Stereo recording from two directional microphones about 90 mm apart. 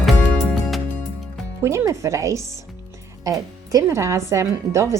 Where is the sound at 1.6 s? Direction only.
35° right (ahead or behind).